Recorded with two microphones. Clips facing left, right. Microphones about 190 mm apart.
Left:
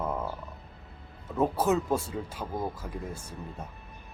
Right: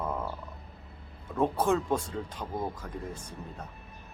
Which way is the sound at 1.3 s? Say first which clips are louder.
Left 1 dB; 5° left (ahead or behind).